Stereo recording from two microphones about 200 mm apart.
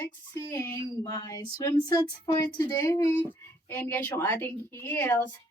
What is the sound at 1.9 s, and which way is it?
Speech, 20° left (ahead or behind).